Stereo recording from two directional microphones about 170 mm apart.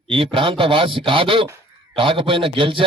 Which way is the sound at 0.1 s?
30° right (ahead or behind).